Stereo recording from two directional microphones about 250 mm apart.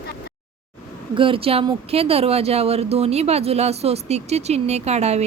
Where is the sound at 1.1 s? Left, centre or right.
Right.